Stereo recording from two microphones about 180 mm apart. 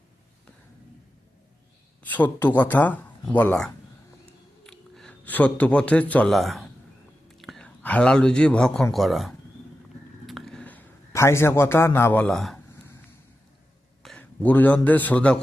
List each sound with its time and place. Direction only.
2.0 s a man's voice: 10° left (ahead or behind)
10.2 s a sound: centre (ahead or behind)
14.0 s a man's voice: 5° left (ahead or behind)